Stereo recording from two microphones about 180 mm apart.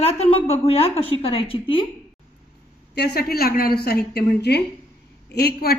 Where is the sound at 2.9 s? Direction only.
65° left (ahead or behind).